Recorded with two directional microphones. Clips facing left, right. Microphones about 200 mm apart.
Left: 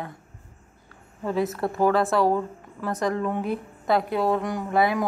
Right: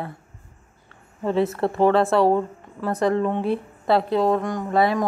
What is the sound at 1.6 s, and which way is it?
A woman's voice, 30° right (ahead or behind).